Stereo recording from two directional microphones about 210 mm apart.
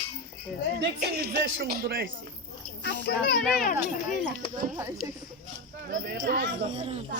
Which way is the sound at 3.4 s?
5° left (ahead or behind).